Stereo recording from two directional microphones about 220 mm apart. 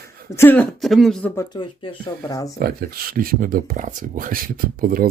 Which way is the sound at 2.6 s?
40° right (ahead or behind).